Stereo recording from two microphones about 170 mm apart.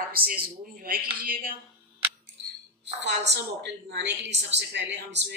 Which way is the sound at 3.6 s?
90° right.